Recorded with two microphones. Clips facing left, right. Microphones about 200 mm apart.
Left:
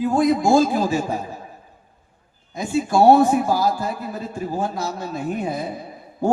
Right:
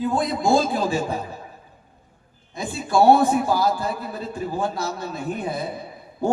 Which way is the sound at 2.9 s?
45° left (ahead or behind).